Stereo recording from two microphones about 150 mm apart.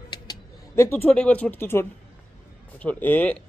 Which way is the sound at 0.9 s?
10° left (ahead or behind).